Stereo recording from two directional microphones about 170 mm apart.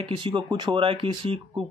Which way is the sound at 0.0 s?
30° right (ahead or behind).